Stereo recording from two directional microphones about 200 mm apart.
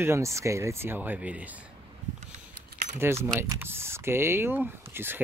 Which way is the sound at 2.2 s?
40° right (ahead or behind).